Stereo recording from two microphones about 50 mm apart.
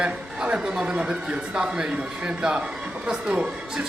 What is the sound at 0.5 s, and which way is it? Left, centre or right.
Speech, centre.